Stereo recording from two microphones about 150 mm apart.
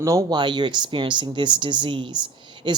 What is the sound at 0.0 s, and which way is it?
Speech, 20° right (ahead or behind).